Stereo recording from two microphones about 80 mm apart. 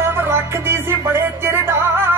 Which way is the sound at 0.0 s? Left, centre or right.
Right.